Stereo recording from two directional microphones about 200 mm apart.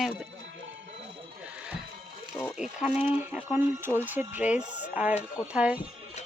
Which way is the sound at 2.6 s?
5° right (ahead or behind).